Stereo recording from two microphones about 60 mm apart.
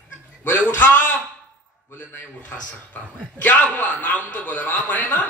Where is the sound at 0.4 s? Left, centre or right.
Left.